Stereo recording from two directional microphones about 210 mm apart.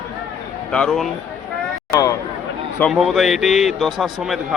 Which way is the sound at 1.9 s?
15° left (ahead or behind).